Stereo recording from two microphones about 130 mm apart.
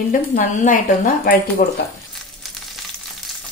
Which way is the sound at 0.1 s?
90° left.